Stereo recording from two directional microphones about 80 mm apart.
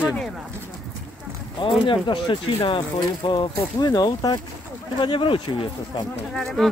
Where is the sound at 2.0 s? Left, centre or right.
Left.